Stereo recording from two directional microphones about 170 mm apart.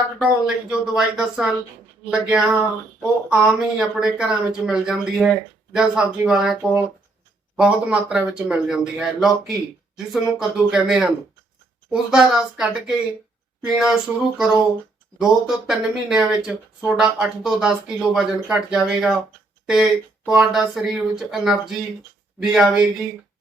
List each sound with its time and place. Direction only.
0.2 s speech: 5° right (ahead or behind)
22.5 s speech: 5° right (ahead or behind)